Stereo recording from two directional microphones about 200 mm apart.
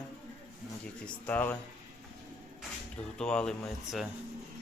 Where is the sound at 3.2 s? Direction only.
5° left (ahead or behind).